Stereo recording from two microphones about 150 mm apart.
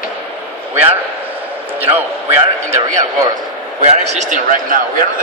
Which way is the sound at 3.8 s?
50° right (ahead or behind).